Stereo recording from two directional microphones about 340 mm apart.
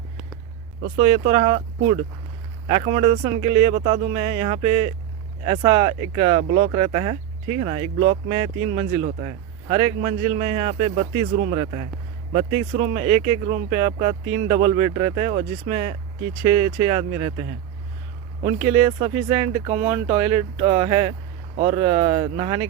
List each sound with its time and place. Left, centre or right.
0.9 s speech: centre
18.4 s speech: centre